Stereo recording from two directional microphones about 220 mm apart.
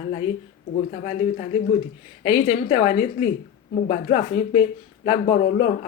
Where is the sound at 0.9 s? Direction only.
35° left (ahead or behind).